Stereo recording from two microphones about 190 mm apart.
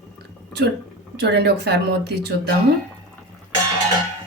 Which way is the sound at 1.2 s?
60° right (ahead or behind).